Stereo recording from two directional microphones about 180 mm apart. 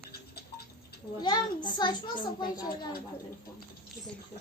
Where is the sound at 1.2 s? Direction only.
25° left (ahead or behind).